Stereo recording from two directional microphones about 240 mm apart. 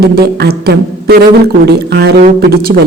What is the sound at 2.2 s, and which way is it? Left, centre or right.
Beatboxing, right.